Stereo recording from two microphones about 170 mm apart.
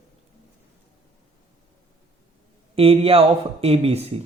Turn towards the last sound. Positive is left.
turn(degrees=-35)  # may be behind; listen again after turning